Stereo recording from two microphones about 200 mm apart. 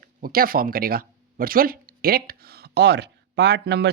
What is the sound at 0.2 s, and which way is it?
Speech, 45° right (ahead or behind).